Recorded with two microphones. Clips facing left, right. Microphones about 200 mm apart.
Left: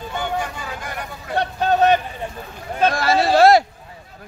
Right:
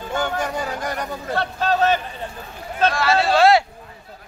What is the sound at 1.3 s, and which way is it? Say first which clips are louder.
Speech: left 3 dB; 20° left (ahead or behind).